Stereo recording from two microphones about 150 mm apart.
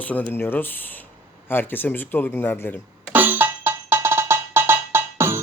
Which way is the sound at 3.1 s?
15° right (ahead or behind).